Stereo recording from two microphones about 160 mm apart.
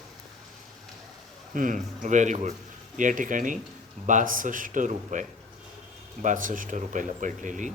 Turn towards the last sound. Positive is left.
turn(degrees=-50)  # may be behind; listen again after turning